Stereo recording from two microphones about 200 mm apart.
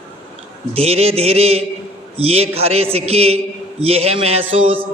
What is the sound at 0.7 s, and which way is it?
A man's voice, 30° right (ahead or behind).